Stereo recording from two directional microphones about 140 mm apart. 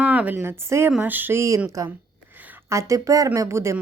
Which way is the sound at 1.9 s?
10° right (ahead or behind).